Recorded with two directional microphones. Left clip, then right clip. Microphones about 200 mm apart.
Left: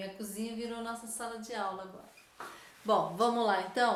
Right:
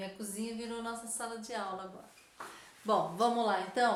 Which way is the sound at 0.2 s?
5° right (ahead or behind).